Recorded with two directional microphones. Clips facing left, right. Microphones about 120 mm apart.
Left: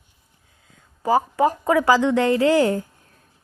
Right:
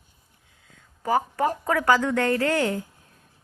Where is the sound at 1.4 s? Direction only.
20° left (ahead or behind).